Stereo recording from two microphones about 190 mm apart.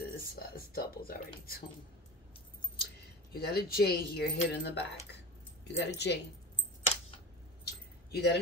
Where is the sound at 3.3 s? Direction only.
55° left (ahead or behind).